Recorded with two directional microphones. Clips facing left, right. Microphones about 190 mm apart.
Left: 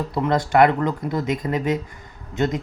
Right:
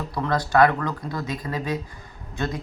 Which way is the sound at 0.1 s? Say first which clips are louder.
Left 2 dB; 20° left (ahead or behind).